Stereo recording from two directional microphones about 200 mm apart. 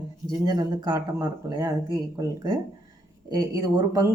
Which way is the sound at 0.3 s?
20° right (ahead or behind).